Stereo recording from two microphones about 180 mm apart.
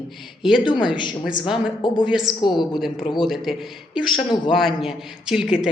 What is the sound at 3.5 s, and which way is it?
A man's voice, centre (ahead or behind).